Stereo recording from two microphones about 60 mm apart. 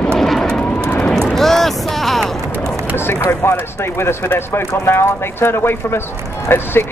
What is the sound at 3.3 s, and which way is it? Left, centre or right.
Speech, left.